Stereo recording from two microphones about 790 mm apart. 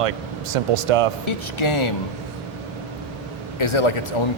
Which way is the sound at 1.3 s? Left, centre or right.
Left.